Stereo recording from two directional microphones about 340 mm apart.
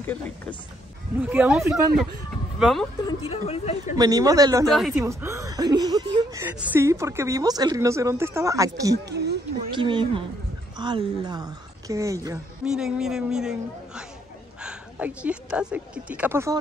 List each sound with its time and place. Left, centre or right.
0.0 s speech: centre
3.1 s a woman's voice: centre
3.9 s speech: centre
4.6 s speech: centre
8.9 s speech: right
9.7 s a woman's voice: centre